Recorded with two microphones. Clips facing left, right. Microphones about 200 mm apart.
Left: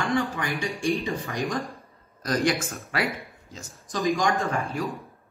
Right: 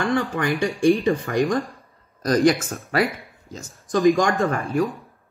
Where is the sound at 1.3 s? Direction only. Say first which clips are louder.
Right 10 dB; 55° right (ahead or behind).